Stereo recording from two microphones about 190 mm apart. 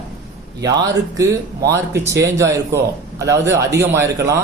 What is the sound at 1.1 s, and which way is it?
A man's voice, 15° right (ahead or behind).